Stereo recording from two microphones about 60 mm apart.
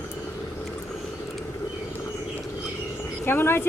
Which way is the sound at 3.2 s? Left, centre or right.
Left.